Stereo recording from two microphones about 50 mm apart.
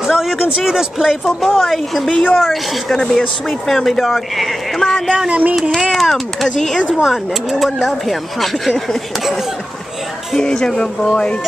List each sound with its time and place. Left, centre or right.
0.0 s a sound: centre
0.6 s speech: centre
3.0 s speech: centre
5.0 s speech: centre
5.3 s child singing: right
5.9 s speech: centre
6.8 s speech: centre